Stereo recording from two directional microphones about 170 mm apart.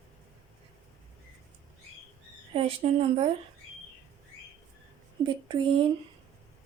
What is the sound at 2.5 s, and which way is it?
Speech, 35° right (ahead or behind).